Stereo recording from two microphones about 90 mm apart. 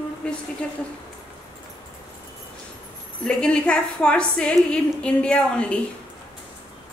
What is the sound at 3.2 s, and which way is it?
A woman's voice, 10° left (ahead or behind).